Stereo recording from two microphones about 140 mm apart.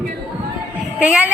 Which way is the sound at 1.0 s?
10° right (ahead or behind).